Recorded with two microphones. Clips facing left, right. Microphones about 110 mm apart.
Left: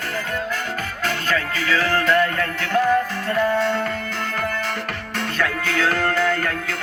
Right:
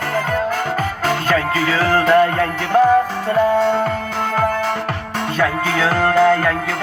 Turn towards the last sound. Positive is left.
turn(degrees=-45)  # may be behind; listen again after turning